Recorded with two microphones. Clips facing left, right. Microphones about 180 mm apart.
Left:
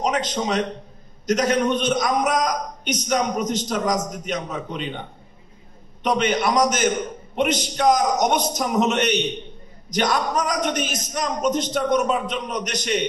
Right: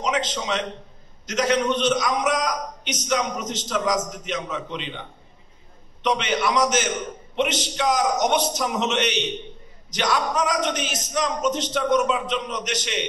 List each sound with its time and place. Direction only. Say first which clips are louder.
0.0 s a man's voice: left 3 dB; 45° left (ahead or behind)
6.0 s a man's voice: left 2 dB; 50° left (ahead or behind)